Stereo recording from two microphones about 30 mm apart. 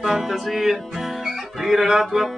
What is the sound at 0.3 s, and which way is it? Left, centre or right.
Music, centre.